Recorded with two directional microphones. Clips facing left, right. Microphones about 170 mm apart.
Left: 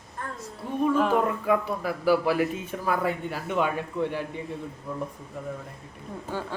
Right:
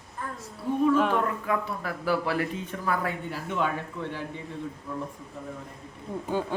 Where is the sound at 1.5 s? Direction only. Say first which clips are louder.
Left 4 dB; 10° left (ahead or behind).